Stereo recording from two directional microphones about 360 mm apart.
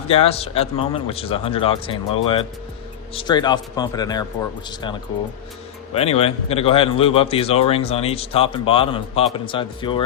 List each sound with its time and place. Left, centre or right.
0.1 s a man's voice: centre